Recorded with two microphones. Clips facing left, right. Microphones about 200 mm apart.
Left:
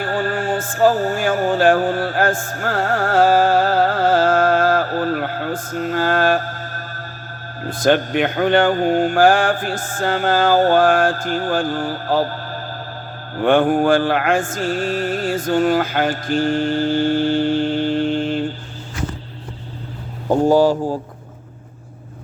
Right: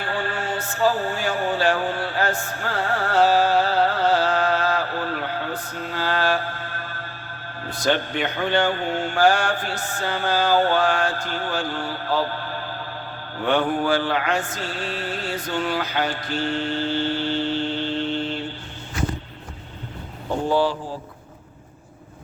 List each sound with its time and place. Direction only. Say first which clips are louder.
0.0 s music: left 6 dB; 45° left (ahead or behind)
7.6 s mantra: left 7 dB; 50° left (ahead or behind)
20.2 s mantra: left 8 dB; 45° left (ahead or behind)